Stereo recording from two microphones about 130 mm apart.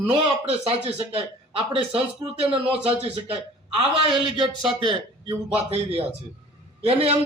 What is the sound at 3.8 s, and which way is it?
Speech, 45° right (ahead or behind).